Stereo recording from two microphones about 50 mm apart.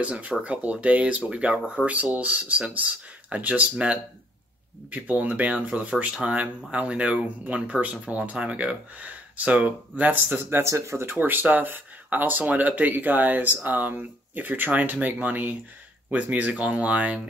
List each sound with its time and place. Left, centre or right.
0.0 s speech: right
10.2 s speech: right
10.6 s speech: right
11.1 s speech: right